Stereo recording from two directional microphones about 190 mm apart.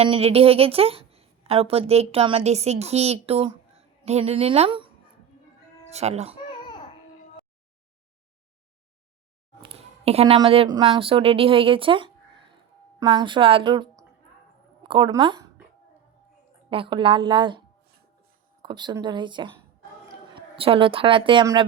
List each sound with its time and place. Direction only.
0.0 s a woman's voice: 30° right (ahead or behind)
5.9 s a woman's voice: 35° right (ahead or behind)
6.5 s a sound: 25° left (ahead or behind)
9.6 s a woman's voice: 30° right (ahead or behind)
16.6 s a woman's voice: 25° right (ahead or behind)
18.6 s a woman's voice: 25° right (ahead or behind)